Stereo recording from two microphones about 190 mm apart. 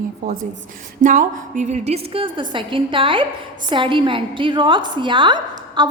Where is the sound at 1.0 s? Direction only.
40° right (ahead or behind).